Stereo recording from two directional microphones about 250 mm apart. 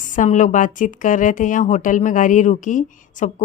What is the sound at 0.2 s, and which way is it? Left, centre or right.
A woman's voice, left.